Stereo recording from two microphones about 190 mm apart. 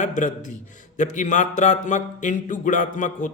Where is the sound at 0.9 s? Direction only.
40° left (ahead or behind).